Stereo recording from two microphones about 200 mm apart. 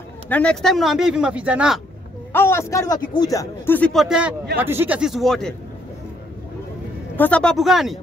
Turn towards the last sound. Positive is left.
turn(degrees=0)  # may be behind; listen again after turning